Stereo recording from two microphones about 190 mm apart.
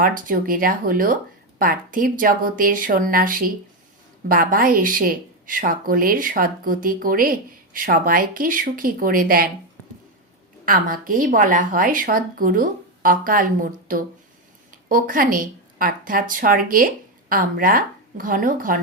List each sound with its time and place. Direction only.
0.0 s speech: 45° right (ahead or behind)
10.7 s a woman's voice: 50° right (ahead or behind)